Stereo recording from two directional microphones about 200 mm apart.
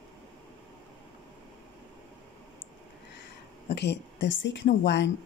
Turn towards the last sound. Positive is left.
turn(degrees=60)  # may be behind; listen again after turning